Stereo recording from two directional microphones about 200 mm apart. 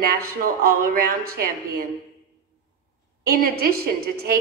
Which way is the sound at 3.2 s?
50° right (ahead or behind).